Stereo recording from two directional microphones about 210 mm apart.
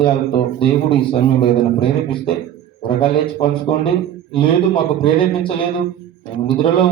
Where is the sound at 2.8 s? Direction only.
25° left (ahead or behind).